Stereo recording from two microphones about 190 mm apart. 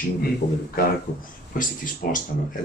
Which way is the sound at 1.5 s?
45° left (ahead or behind).